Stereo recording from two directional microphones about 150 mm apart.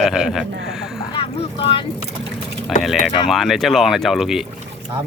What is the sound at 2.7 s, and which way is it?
Speech, centre (ahead or behind).